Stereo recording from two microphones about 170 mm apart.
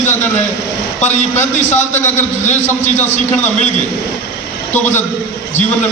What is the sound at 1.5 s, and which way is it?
A man's voice, 45° left (ahead or behind).